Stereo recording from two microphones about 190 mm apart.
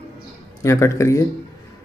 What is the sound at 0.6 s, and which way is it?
Speech, 15° left (ahead or behind).